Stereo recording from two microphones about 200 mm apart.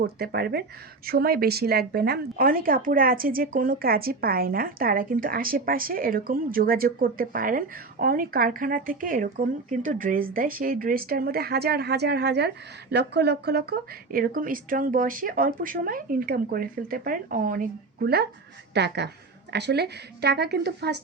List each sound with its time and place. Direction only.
0.0 s a woman's voice: 50° right (ahead or behind)